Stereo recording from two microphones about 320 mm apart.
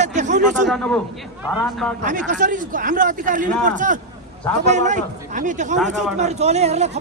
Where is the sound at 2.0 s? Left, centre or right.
Right.